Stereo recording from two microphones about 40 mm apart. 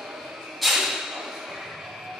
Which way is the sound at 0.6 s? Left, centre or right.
Centre.